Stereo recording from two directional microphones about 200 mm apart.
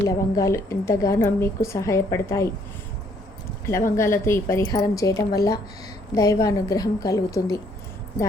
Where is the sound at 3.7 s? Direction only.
15° left (ahead or behind).